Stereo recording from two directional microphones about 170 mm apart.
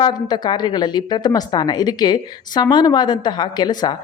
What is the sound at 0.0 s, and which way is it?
Speech, 25° left (ahead or behind).